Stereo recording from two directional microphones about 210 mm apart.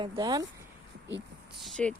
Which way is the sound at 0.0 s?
20° right (ahead or behind).